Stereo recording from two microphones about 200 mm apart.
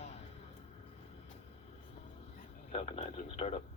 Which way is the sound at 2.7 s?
30° left (ahead or behind).